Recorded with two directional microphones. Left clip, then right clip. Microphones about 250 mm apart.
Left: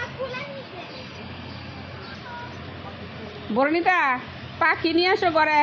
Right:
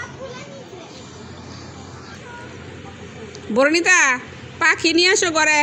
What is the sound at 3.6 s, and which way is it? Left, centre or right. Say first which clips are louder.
A woman's voice: right 6 dB; centre.